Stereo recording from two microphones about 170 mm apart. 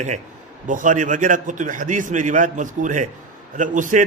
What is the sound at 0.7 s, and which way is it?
A man's voice, 50° right (ahead or behind).